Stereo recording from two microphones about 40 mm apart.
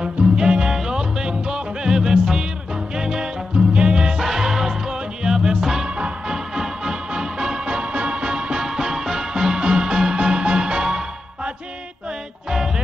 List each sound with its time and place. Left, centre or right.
0.0 s music: right
4.2 s music: centre
5.9 s music: right